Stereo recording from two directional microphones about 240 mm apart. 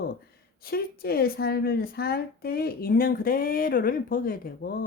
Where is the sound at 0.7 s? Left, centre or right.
Left.